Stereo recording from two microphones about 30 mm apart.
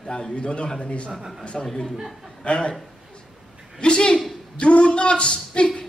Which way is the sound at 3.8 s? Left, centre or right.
Left.